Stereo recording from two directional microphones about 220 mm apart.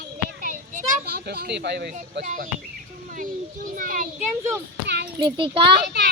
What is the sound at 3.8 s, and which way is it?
Speech, 40° right (ahead or behind).